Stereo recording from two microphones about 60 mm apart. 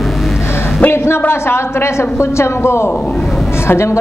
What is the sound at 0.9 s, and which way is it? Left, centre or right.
A woman's voice, left.